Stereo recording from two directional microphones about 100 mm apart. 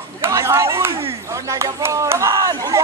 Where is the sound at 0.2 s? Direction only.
30° right (ahead or behind).